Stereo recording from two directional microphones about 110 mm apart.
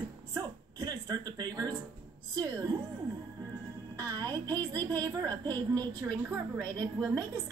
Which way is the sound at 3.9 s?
35° right (ahead or behind).